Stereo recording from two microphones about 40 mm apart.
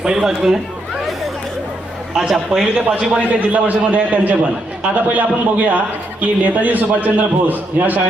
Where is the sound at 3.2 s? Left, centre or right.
Right.